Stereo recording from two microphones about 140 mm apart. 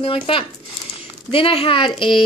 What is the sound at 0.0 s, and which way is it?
A woman's voice, 40° left (ahead or behind).